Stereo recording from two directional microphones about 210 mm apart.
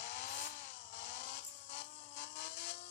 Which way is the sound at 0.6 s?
60° left (ahead or behind).